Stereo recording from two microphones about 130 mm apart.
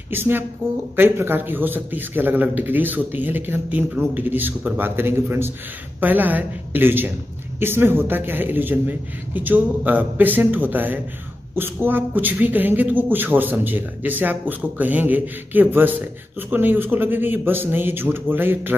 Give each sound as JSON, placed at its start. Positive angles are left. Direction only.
{"t": 0.1, "sound": "a man's voice", "side_deg": -15}